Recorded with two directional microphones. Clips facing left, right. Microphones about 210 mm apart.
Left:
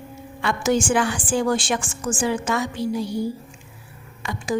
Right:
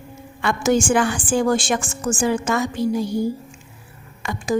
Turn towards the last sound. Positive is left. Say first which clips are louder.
# right 3 dB
turn(degrees=-50)  # may be behind; listen again after turning